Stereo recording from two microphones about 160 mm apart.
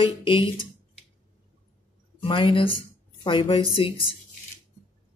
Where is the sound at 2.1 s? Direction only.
30° left (ahead or behind).